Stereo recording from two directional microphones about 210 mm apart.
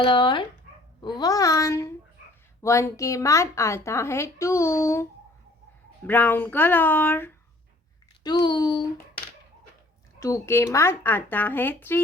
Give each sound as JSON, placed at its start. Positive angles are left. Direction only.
{"t": 0.0, "sound": "speech", "side_deg": 25}
{"t": 6.1, "sound": "speech", "side_deg": 10}
{"t": 8.2, "sound": "speech", "side_deg": 20}
{"t": 10.2, "sound": "speech", "side_deg": 15}